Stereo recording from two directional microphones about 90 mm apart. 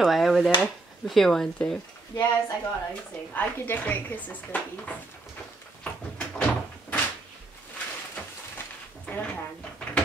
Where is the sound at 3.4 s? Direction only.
20° left (ahead or behind).